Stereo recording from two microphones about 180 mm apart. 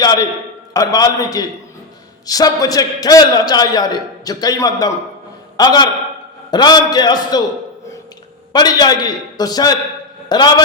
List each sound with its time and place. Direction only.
0.0 s a man's voice: 20° left (ahead or behind)
8.5 s a man's voice: 20° left (ahead or behind)